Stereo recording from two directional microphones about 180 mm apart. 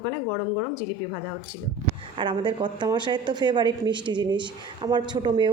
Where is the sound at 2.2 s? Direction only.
25° right (ahead or behind).